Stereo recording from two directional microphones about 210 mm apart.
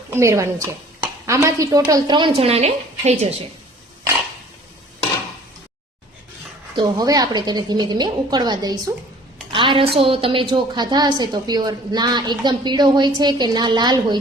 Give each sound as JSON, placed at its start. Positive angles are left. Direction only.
{"t": 0.1, "sound": "a woman's voice", "side_deg": -15}
{"t": 6.7, "sound": "a woman's voice", "side_deg": -20}